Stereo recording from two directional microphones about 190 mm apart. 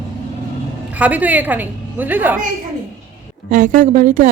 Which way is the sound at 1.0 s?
10° right (ahead or behind).